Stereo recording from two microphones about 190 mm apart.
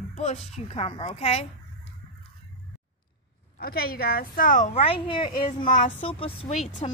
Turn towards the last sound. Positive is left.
turn(degrees=35)  # may be behind; listen again after turning